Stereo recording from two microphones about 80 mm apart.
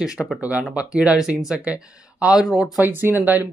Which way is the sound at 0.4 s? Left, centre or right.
Centre.